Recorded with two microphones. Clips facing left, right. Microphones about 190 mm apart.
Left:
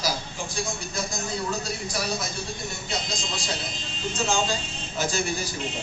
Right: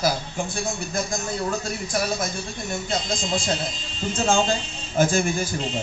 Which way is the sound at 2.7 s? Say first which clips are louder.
Right 6 dB; 50° right (ahead or behind).